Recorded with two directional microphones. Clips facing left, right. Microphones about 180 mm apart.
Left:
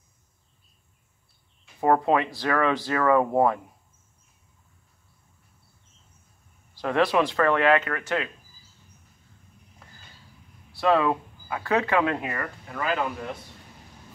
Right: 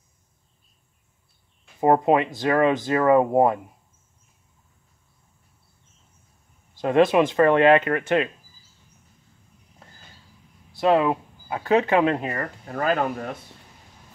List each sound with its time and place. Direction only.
1.8 s speech: 20° right (ahead or behind)
6.8 s speech: 20° right (ahead or behind)
10.7 s speech: 20° right (ahead or behind)
12.2 s speech: 35° right (ahead or behind); by 13.4 s 50° right (ahead or behind)